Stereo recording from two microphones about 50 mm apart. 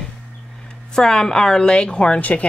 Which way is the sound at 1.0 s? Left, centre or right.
Centre.